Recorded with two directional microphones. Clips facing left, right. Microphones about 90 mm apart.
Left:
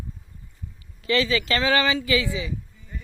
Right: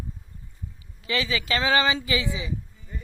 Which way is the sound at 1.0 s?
15° right (ahead or behind).